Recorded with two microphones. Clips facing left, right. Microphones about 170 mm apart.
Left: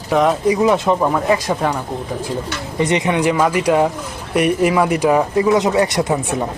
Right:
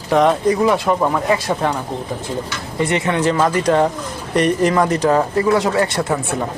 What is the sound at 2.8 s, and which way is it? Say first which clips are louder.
Speech: left 1 dB; 20° left (ahead or behind).